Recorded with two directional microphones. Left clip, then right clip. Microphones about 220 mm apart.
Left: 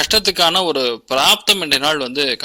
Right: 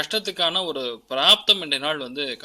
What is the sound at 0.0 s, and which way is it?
A man's voice, 50° left (ahead or behind).